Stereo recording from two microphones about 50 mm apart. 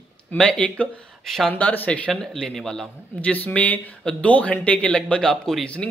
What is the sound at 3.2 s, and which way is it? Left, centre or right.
Speech, left.